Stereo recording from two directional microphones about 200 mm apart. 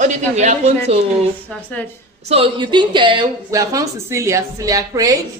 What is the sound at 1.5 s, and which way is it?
Speech, 5° left (ahead or behind).